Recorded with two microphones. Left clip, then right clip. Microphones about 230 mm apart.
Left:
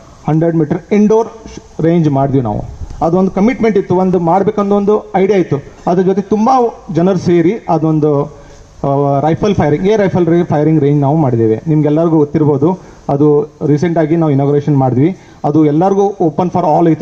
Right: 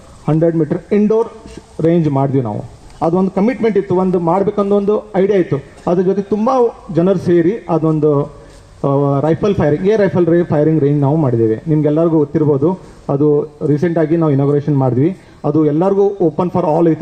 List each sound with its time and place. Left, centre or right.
0.3 s a man's voice: left